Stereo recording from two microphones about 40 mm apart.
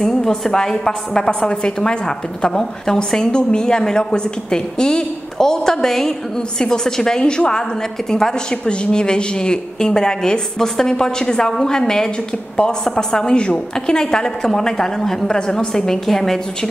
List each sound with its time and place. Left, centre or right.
0.0 s a woman's voice: centre
1.4 s a woman's voice: left; by 15.2 s centre
15.2 s a woman's voice: centre